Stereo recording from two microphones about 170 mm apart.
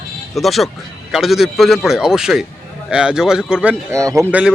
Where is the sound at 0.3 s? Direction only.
Centre (ahead or behind).